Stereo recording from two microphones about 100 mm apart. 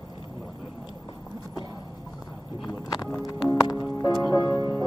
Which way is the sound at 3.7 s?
40° left (ahead or behind).